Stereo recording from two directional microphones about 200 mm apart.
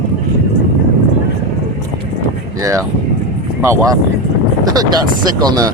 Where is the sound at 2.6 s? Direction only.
15° right (ahead or behind).